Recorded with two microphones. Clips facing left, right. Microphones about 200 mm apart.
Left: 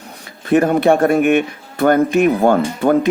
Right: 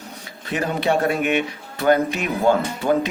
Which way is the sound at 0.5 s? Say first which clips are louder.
Left 9 dB; 55° left (ahead or behind).